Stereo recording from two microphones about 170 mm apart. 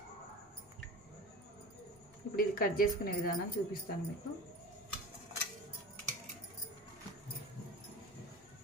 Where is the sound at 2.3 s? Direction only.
60° left (ahead or behind).